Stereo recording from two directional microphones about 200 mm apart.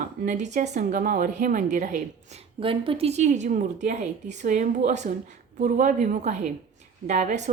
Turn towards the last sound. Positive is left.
turn(degrees=-35)  # may be behind; listen again after turning